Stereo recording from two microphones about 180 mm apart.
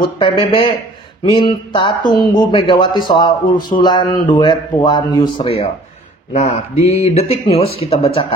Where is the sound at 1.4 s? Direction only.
25° left (ahead or behind).